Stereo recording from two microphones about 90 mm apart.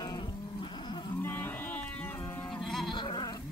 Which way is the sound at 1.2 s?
20° left (ahead or behind).